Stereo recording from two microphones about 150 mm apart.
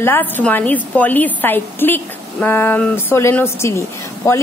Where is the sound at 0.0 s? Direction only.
10° left (ahead or behind).